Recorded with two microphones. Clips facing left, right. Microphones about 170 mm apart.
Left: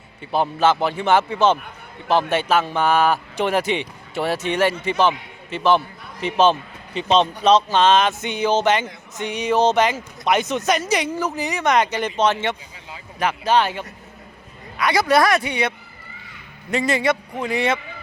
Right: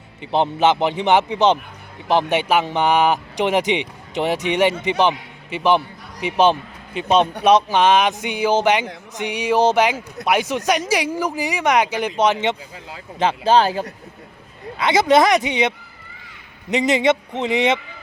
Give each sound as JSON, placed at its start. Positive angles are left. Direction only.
{"t": 0.2, "sound": "a man's voice", "side_deg": -20}
{"t": 13.1, "sound": "speech", "side_deg": -30}
{"t": 14.8, "sound": "a man's voice", "side_deg": -20}